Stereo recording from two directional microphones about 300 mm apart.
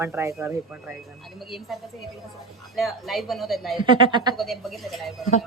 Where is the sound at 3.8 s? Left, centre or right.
Centre.